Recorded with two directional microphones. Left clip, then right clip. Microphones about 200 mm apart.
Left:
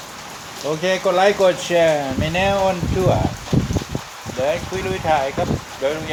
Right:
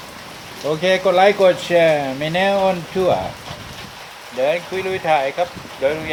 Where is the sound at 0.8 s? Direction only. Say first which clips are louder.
Right 3 dB; centre (ahead or behind).